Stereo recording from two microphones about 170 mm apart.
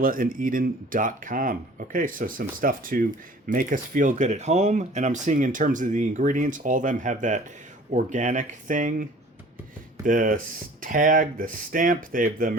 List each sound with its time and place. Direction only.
0.0 s speech: 55° right (ahead or behind)